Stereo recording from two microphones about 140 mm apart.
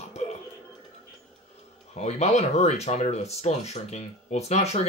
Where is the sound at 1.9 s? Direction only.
50° left (ahead or behind).